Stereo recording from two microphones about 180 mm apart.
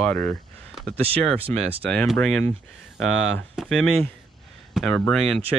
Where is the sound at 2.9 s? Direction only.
90° right.